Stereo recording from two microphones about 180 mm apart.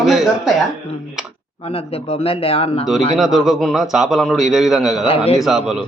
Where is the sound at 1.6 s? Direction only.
35° left (ahead or behind).